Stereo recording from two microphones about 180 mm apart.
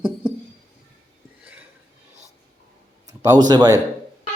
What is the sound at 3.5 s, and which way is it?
Speech, 20° right (ahead or behind).